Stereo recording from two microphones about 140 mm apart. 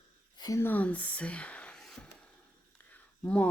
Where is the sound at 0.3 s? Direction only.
30° left (ahead or behind).